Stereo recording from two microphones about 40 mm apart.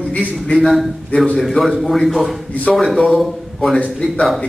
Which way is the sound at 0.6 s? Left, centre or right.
Centre.